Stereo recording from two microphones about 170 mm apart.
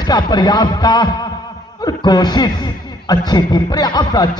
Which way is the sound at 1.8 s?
25° left (ahead or behind).